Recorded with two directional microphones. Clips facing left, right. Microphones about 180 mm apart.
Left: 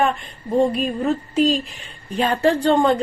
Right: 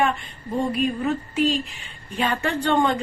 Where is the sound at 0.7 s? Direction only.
40° left (ahead or behind).